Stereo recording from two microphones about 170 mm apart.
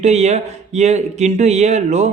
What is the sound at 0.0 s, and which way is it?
Speech, 40° right (ahead or behind).